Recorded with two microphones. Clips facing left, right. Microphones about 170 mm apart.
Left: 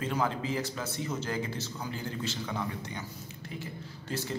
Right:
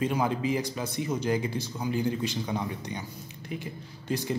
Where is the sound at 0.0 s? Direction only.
15° right (ahead or behind).